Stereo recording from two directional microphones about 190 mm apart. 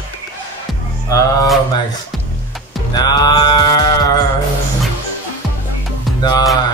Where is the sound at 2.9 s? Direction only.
20° left (ahead or behind).